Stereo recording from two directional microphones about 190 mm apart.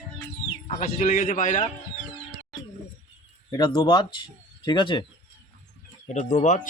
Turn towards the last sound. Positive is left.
turn(degrees=40)  # may be behind; listen again after turning